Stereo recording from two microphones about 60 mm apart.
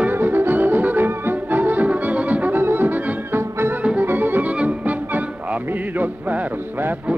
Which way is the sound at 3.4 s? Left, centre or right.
Right.